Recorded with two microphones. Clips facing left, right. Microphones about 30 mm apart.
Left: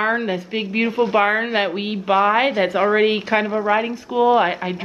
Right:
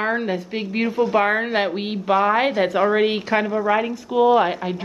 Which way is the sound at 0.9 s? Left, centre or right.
Left.